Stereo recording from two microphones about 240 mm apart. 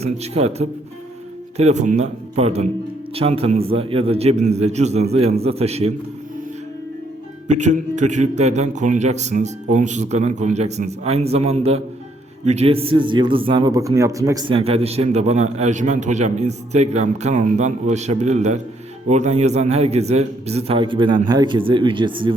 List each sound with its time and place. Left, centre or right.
0.0 s a man's voice: right
7.4 s a man's voice: right